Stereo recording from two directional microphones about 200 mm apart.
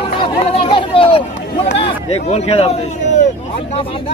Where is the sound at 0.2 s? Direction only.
30° left (ahead or behind).